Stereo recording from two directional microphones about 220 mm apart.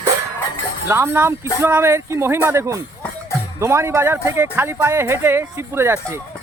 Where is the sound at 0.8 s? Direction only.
10° right (ahead or behind).